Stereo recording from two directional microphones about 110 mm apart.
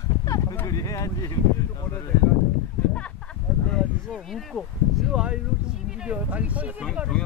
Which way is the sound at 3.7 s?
5° left (ahead or behind).